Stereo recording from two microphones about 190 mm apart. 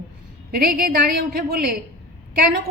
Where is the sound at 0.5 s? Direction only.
50° right (ahead or behind).